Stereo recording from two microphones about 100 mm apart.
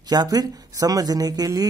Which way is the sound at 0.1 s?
40° right (ahead or behind).